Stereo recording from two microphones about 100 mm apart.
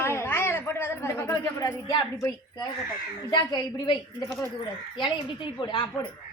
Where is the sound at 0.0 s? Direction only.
25° left (ahead or behind).